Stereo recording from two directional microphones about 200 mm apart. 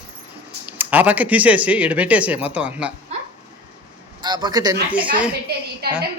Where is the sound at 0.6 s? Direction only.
10° right (ahead or behind).